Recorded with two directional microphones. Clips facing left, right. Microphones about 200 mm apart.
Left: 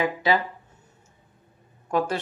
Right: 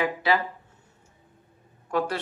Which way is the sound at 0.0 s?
20° left (ahead or behind).